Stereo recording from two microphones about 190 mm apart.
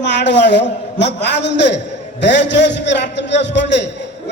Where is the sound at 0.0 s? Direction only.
65° left (ahead or behind).